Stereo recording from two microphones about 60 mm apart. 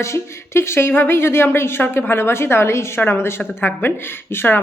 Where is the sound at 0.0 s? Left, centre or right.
Left.